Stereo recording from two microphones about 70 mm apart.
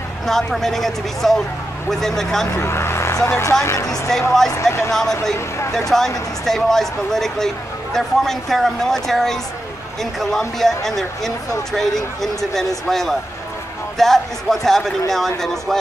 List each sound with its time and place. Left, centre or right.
0.3 s speech: centre
2.5 s vehicle: left
3.2 s speech: left
4.1 s speech: centre
4.5 s speech: left
5.9 s speech: centre